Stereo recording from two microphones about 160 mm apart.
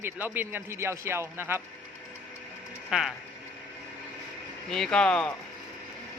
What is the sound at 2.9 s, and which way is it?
Speech, 5° right (ahead or behind).